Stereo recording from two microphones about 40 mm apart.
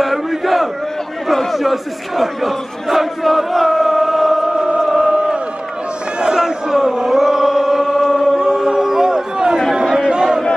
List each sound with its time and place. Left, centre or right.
0.0 s battle cry: centre
1.2 s crowd: centre
4.5 s choir: centre
4.8 s a sound: centre
5.1 s crowd: right
6.1 s a sound: centre
6.7 s chant: centre
8.4 s a sound: centre
9.8 s chatter: centre